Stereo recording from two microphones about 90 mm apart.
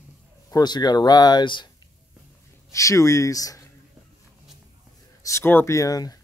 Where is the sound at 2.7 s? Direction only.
35° left (ahead or behind).